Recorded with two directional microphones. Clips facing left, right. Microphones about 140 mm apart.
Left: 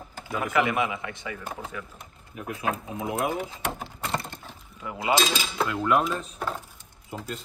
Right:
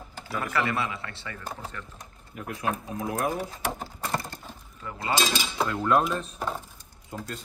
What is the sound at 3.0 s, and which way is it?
Speech, 25° left (ahead or behind).